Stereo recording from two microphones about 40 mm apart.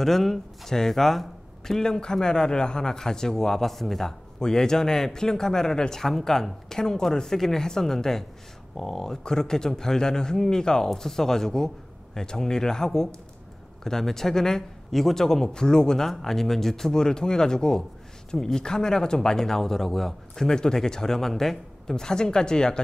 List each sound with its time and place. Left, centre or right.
0.0 s a man's voice: centre
4.4 s a man's voice: centre